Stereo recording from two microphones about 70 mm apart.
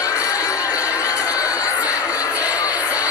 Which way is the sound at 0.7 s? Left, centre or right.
Right.